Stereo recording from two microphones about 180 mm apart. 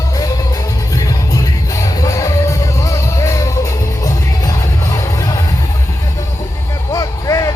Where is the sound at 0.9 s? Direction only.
20° left (ahead or behind).